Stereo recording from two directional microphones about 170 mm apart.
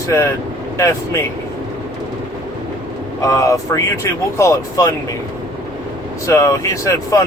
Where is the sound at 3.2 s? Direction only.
20° left (ahead or behind).